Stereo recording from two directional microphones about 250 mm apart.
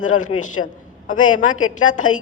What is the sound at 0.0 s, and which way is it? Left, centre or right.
A man's voice, left.